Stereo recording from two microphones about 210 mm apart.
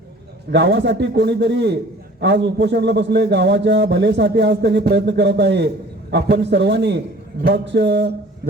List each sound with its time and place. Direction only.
0.5 s a man's voice: 55° right (ahead or behind)